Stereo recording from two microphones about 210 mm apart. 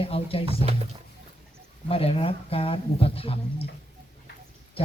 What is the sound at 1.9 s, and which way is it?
Speech, 25° left (ahead or behind).